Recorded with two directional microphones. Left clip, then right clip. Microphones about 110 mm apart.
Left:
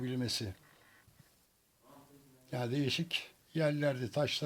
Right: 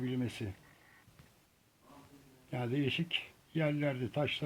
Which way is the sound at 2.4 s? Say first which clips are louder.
Even; 30° left (ahead or behind).